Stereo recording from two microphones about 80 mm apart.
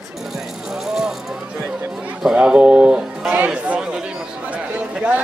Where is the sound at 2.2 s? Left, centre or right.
Centre.